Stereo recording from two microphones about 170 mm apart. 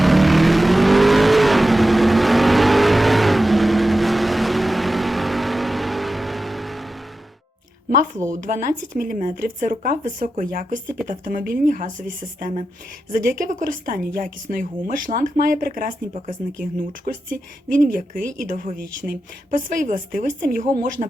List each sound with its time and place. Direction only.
0.0 s vehicle: centre (ahead or behind)
8.3 s a woman's voice: 50° right (ahead or behind)
13.1 s a woman's voice: 55° right (ahead or behind)
17.1 s a woman's voice: 55° right (ahead or behind)
21.0 s speech: 40° right (ahead or behind)